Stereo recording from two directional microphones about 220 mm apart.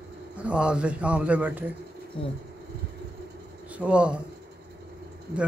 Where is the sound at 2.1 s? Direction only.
25° left (ahead or behind).